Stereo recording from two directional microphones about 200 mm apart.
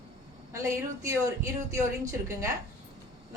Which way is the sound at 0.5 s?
15° right (ahead or behind).